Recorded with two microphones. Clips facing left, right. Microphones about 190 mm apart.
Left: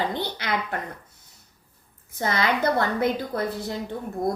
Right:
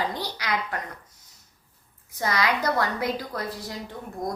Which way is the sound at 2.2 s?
25° left (ahead or behind).